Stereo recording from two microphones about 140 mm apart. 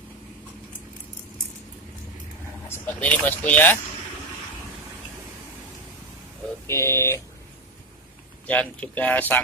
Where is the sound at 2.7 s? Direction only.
10° left (ahead or behind).